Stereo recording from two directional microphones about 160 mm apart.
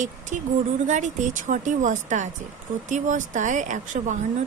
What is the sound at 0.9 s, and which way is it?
Speech, 50° right (ahead or behind).